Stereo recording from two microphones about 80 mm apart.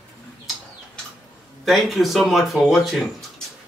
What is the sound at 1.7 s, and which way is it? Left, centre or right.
Speech, centre.